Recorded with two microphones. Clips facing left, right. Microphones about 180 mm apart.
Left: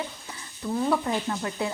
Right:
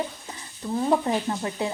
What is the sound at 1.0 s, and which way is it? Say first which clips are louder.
Speech: right 2 dB; 25° right (ahead or behind).